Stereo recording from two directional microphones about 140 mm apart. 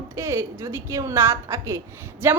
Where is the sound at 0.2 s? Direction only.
20° right (ahead or behind).